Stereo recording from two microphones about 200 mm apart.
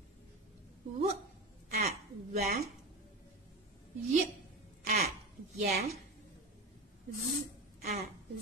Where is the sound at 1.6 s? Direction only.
45° right (ahead or behind).